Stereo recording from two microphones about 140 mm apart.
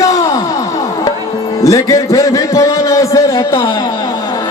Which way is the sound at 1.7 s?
20° left (ahead or behind).